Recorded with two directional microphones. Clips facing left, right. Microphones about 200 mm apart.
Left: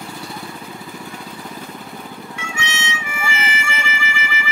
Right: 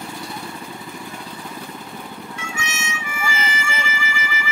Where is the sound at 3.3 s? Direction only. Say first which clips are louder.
Left 1 dB; 65° left (ahead or behind).